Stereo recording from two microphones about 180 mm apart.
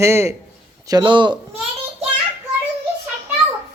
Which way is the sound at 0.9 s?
25° right (ahead or behind).